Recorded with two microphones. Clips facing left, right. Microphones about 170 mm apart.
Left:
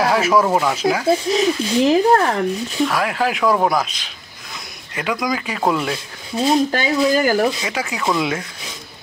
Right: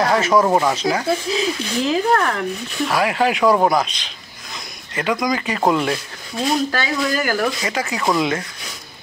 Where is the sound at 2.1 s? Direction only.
30° left (ahead or behind).